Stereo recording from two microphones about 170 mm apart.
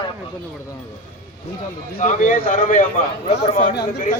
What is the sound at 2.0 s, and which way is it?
A man's voice, 50° left (ahead or behind).